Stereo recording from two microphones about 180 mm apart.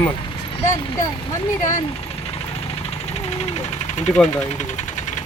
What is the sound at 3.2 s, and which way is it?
Speech, 40° left (ahead or behind).